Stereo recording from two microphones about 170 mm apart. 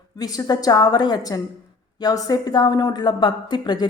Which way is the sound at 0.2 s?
20° left (ahead or behind).